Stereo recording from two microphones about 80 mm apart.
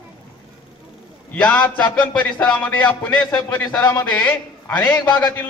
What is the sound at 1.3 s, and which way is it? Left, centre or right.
Speech, centre.